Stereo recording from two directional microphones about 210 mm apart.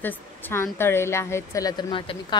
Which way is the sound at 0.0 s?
10° left (ahead or behind).